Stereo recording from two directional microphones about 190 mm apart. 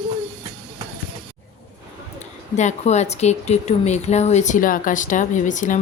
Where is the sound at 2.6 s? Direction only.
35° left (ahead or behind).